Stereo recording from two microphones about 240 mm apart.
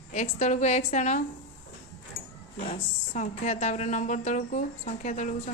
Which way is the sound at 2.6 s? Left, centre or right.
Left.